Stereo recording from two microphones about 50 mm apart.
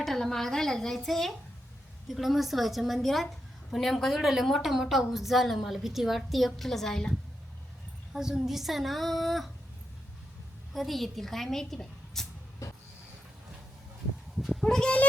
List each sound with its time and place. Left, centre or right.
0.0 s a woman's voice: centre
8.1 s a woman's voice: centre
10.8 s a woman's voice: centre
12.6 s a sound: left
14.3 s goat: centre
14.6 s speech: centre